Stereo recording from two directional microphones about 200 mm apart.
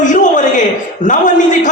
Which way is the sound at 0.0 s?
40° left (ahead or behind).